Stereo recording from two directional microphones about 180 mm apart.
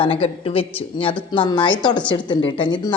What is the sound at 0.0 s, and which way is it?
A woman's voice, 30° left (ahead or behind).